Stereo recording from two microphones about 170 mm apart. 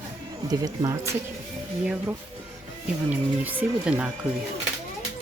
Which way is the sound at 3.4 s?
10° right (ahead or behind).